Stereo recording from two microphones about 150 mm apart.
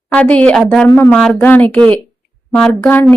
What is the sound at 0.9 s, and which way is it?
Speech, 20° left (ahead or behind).